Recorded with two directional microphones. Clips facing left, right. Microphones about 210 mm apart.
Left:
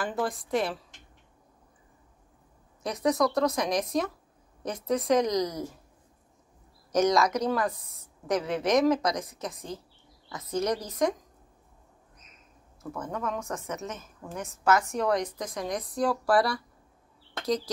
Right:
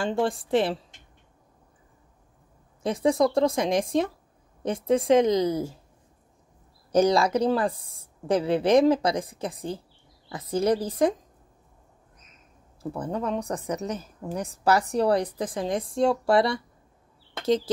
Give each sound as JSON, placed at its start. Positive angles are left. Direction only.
{"t": 0.0, "sound": "speech", "side_deg": -30}
{"t": 2.8, "sound": "speech", "side_deg": -30}
{"t": 6.9, "sound": "a woman's voice", "side_deg": -30}
{"t": 12.8, "sound": "a woman's voice", "side_deg": -30}